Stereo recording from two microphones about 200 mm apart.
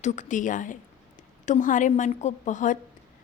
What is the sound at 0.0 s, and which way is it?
A woman's voice, 35° left (ahead or behind).